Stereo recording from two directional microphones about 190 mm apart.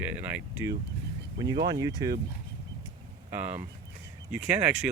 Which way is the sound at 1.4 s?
20° right (ahead or behind).